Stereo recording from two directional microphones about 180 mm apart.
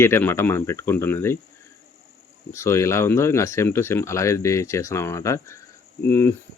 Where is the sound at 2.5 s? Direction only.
15° left (ahead or behind).